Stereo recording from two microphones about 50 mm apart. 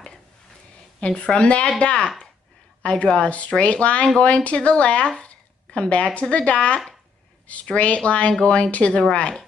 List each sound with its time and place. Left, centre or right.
1.2 s speech: centre